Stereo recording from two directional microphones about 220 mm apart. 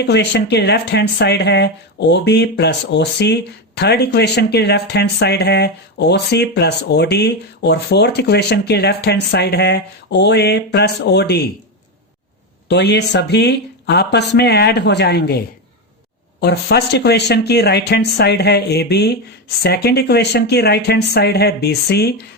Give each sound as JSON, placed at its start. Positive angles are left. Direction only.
{"t": 0.0, "sound": "speech", "side_deg": 50}
{"t": 12.6, "sound": "speech", "side_deg": 50}
{"t": 16.4, "sound": "speech", "side_deg": 50}